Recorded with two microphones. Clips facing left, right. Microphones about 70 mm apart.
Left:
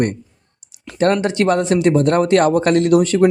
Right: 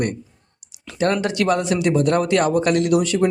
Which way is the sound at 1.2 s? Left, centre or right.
Left.